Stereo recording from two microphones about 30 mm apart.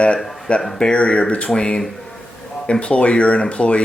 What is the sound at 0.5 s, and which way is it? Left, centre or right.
Speech, left.